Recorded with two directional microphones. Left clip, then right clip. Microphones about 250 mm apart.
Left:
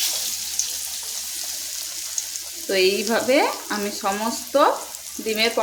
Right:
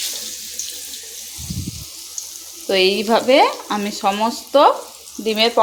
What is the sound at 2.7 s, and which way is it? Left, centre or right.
Frying, centre.